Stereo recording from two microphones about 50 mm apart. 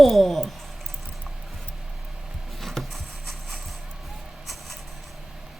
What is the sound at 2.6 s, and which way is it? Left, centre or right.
Rub, centre.